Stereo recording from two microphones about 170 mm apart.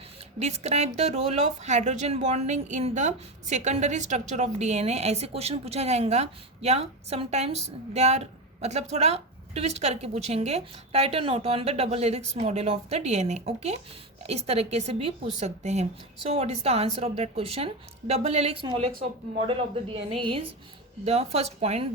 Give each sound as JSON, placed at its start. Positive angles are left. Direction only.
{"t": 0.3, "sound": "a woman's voice", "side_deg": -40}